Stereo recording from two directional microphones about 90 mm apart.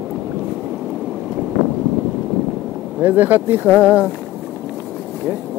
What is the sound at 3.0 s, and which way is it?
Speech, 20° right (ahead or behind).